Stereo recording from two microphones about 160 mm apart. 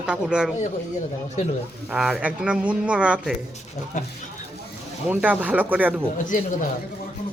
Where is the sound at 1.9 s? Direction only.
5° right (ahead or behind).